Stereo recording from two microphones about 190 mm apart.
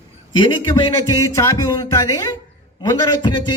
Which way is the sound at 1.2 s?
15° left (ahead or behind).